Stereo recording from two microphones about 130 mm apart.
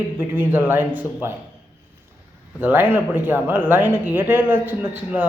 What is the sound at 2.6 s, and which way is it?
A man's voice, 15° right (ahead or behind).